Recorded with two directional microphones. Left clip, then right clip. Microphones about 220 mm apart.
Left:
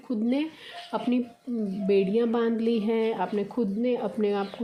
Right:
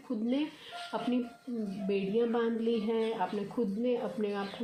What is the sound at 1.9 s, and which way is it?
A woman's voice, 50° left (ahead or behind).